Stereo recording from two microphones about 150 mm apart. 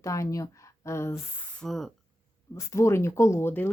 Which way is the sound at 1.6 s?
Centre (ahead or behind).